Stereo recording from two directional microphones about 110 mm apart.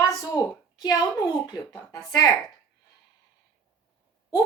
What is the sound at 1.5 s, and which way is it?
Speech, 30° left (ahead or behind).